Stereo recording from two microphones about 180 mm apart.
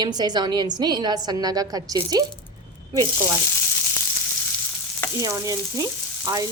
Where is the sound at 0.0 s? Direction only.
20° right (ahead or behind).